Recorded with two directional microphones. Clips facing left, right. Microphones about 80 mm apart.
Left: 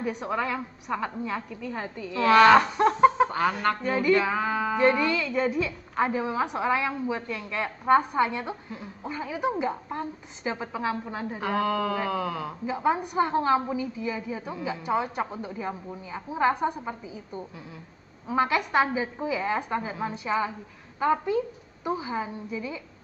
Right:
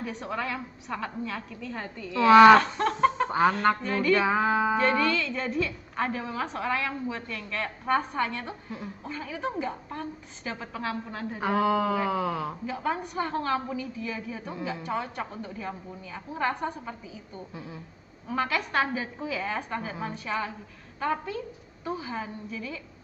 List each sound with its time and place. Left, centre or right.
0.0 s a woman's voice: centre
2.0 s sheep: centre
2.5 s snicker: centre
3.3 s speech: right
3.8 s a woman's voice: centre
4.2 s sheep: centre
4.7 s a woman's voice: centre
11.4 s sheep: centre
12.6 s a woman's voice: centre